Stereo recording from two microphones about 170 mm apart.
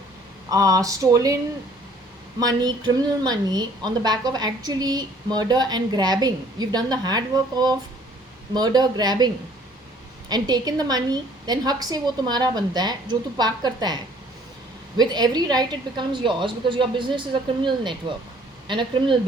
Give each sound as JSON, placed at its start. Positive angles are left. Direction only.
{"t": 0.5, "sound": "speech", "side_deg": -20}
{"t": 2.4, "sound": "speech", "side_deg": -25}